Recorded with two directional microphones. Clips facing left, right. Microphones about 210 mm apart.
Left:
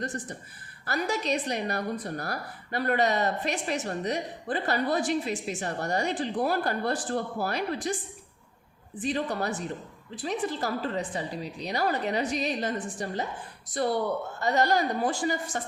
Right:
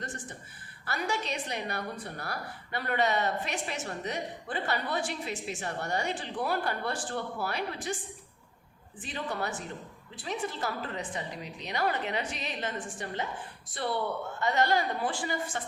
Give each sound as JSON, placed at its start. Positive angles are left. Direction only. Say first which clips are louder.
{"t": 0.9, "sound": "a woman's voice", "louder": "left 5 dB", "side_deg": 40}
{"t": 9.0, "sound": "a woman's voice", "louder": "left 6 dB", "side_deg": 35}